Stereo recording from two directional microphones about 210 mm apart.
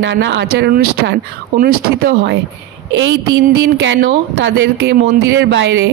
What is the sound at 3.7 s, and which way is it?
A woman's voice, 60° right (ahead or behind).